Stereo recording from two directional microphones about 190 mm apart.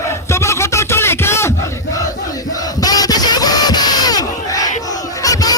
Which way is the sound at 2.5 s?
20° left (ahead or behind).